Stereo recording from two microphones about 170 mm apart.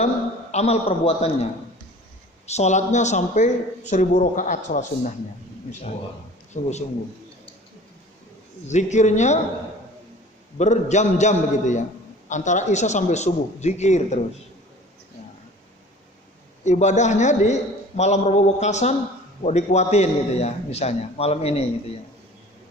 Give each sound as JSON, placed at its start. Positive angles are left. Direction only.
{"t": 0.5, "sound": "a man's voice", "side_deg": 40}
{"t": 2.5, "sound": "speech", "side_deg": 40}
{"t": 6.5, "sound": "a man's voice", "side_deg": 40}
{"t": 8.6, "sound": "speech", "side_deg": 45}
{"t": 10.6, "sound": "speech", "side_deg": 45}
{"t": 16.6, "sound": "a man's voice", "side_deg": 45}